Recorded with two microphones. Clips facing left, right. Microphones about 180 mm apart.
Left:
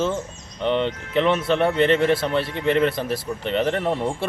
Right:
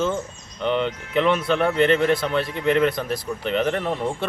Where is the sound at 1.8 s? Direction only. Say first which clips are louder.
Right 1 dB; 30° left (ahead or behind).